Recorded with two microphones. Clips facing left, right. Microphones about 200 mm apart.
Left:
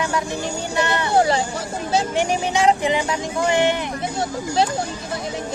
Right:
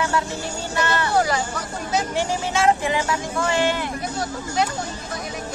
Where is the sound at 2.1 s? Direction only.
15° left (ahead or behind).